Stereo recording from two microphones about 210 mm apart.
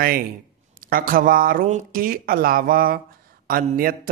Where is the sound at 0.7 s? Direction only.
45° right (ahead or behind).